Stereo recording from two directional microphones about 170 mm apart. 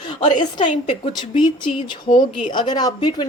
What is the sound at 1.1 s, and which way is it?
A woman's voice, 30° left (ahead or behind).